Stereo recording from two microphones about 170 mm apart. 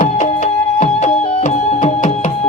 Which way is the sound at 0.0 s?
45° left (ahead or behind).